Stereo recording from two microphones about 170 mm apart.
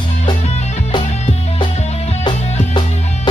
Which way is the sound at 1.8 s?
40° left (ahead or behind).